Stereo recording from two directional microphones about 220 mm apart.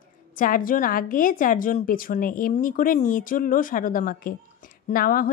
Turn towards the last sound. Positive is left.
turn(degrees=40)  # may be behind; listen again after turning